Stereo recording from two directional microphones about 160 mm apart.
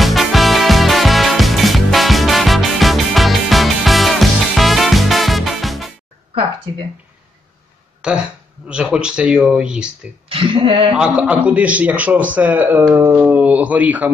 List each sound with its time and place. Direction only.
0.0 s music: centre (ahead or behind)
8.0 s speech: 5° right (ahead or behind)
10.2 s speech: 35° right (ahead or behind)
11.0 s a man's voice: 5° right (ahead or behind)